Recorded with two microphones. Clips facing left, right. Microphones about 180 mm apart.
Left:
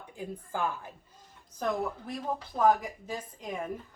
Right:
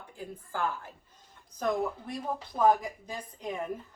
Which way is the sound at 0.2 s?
15° left (ahead or behind).